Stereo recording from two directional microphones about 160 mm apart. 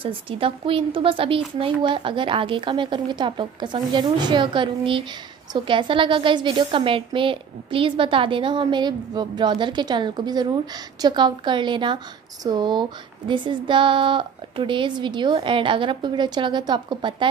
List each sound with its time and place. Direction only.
0.0 s a woman's voice: 35° right (ahead or behind)